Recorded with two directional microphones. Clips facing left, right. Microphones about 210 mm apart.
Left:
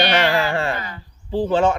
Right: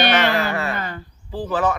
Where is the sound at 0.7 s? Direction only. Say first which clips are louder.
Right 3 dB; 50° right (ahead or behind).